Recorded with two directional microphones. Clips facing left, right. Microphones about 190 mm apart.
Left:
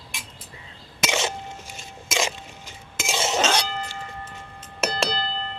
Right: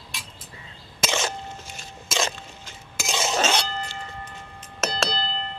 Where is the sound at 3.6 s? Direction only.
15° left (ahead or behind).